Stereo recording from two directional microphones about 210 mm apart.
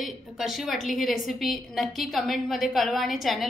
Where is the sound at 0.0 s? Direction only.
Centre (ahead or behind).